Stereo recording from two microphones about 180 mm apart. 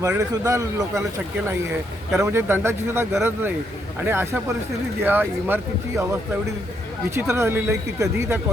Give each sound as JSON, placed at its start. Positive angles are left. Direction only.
{"t": 0.1, "sound": "speech", "side_deg": -15}
{"t": 2.1, "sound": "speech", "side_deg": -15}
{"t": 7.2, "sound": "speech", "side_deg": -15}